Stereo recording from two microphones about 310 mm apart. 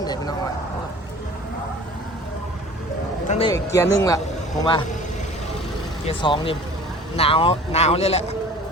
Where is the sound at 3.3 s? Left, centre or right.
Centre.